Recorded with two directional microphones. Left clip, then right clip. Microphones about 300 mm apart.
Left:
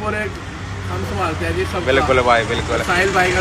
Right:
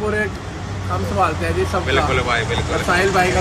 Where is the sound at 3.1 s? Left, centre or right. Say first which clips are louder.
Left 1 dB; right.